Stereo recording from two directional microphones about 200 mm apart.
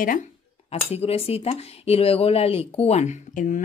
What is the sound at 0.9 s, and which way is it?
Speech, 30° left (ahead or behind).